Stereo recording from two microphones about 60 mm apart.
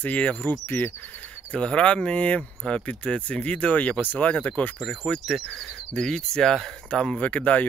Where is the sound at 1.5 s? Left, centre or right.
Centre.